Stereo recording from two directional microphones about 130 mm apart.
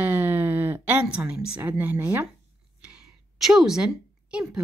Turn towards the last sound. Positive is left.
turn(degrees=-5)  # may be behind; listen again after turning